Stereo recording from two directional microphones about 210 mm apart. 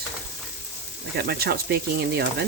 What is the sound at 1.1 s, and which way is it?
Speech, 50° right (ahead or behind).